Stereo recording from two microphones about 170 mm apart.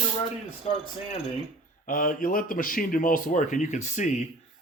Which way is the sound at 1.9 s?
55° left (ahead or behind).